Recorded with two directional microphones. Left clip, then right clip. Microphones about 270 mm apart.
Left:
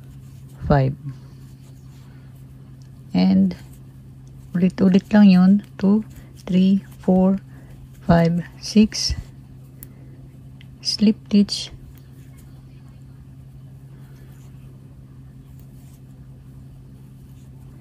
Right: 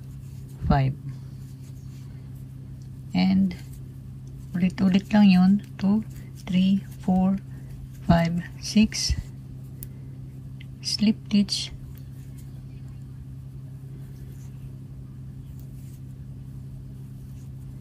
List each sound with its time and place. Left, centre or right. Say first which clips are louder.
0.7 s speech: left 6 dB; centre
3.1 s speech: left 5 dB; left
8.1 s speech: left 5 dB; centre
10.8 s a woman's voice: left 5 dB; left